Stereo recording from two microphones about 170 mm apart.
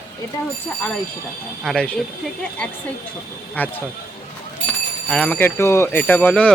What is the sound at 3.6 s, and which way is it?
Speech, 10° left (ahead or behind).